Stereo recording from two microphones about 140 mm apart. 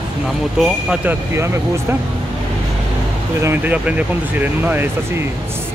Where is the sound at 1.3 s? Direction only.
20° right (ahead or behind).